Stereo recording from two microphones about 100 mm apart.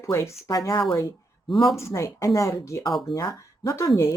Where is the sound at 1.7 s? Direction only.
30° left (ahead or behind).